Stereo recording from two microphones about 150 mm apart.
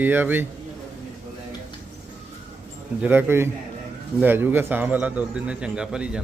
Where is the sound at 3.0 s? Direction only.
15° right (ahead or behind).